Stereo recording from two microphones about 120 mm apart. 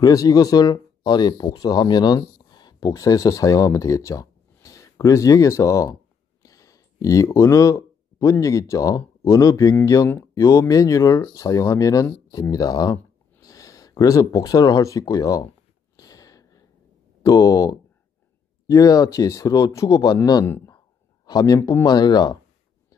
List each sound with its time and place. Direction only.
0.0 s speech: 30° left (ahead or behind)
16.0 s a sound: 30° left (ahead or behind)
17.2 s speech: 30° left (ahead or behind)
20.4 s speech: 20° left (ahead or behind)
21.3 s speech: 35° left (ahead or behind)